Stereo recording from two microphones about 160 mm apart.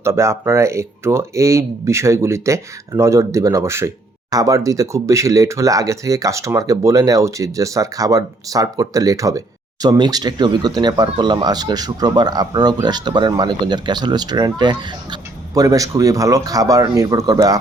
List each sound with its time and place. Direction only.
0.0 s speech: 15° right (ahead or behind)